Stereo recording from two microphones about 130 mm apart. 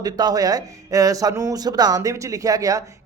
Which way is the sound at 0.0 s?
30° right (ahead or behind).